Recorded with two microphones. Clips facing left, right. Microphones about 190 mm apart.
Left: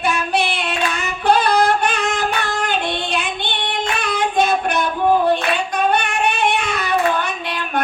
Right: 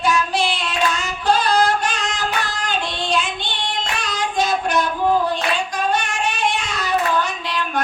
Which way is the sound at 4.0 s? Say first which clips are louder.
Left 4 dB; 55° left (ahead or behind).